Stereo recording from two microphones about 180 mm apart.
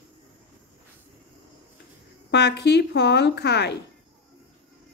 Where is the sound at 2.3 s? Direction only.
70° left (ahead or behind).